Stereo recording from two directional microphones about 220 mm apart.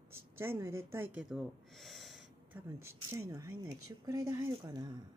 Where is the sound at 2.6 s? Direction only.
10° right (ahead or behind).